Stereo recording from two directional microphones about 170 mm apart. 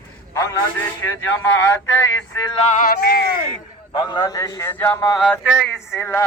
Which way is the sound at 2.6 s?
50° left (ahead or behind).